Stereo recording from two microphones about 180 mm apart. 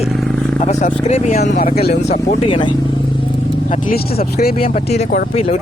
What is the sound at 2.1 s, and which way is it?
Speech, 30° left (ahead or behind).